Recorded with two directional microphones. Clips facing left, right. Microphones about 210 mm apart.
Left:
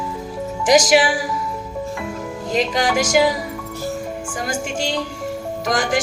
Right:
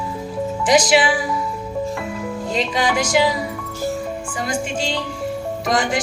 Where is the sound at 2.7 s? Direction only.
45° left (ahead or behind).